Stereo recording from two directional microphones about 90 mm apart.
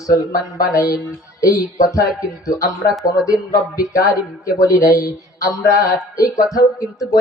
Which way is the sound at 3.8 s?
40° left (ahead or behind).